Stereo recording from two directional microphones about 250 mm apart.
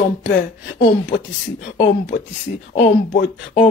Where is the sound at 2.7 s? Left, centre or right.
Left.